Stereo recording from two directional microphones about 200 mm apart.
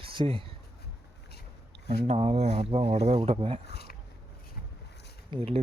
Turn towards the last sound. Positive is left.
turn(degrees=-30)  # may be behind; listen again after turning